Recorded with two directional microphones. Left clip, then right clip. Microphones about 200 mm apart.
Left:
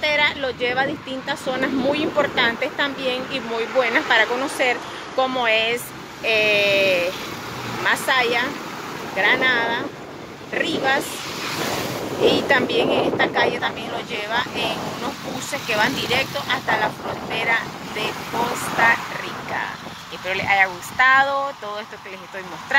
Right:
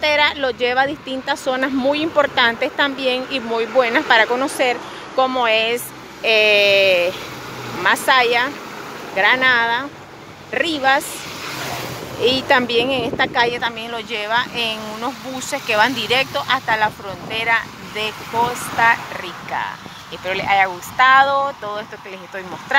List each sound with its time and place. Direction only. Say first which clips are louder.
0.0 s speech: right 3 dB; 20° right (ahead or behind)
12.3 s speech: right 3 dB; 20° right (ahead or behind)
15.7 s speech: right 4 dB; 25° right (ahead or behind)
20.2 s speech: right 2 dB; 15° right (ahead or behind)